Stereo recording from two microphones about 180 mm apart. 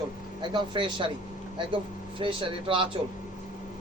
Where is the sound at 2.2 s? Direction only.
30° right (ahead or behind).